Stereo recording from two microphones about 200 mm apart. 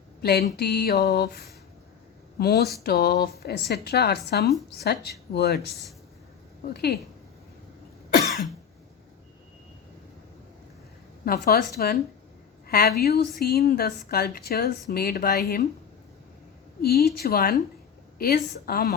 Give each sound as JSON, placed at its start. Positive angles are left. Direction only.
{"t": 0.2, "sound": "a sound", "side_deg": 50}
{"t": 0.5, "sound": "speech", "side_deg": 55}
{"t": 6.7, "sound": "speech", "side_deg": 55}
{"t": 11.3, "sound": "speech", "side_deg": 50}
{"t": 12.6, "sound": "a sound", "side_deg": 50}
{"t": 13.0, "sound": "speech", "side_deg": 50}
{"t": 16.8, "sound": "speech", "side_deg": 50}